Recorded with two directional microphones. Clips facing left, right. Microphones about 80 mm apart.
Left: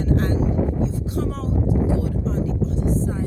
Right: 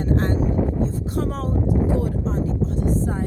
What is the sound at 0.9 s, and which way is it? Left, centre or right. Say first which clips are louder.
Speech: right 1 dB; right.